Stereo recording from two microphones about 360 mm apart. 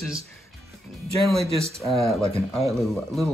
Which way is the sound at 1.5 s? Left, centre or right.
Centre.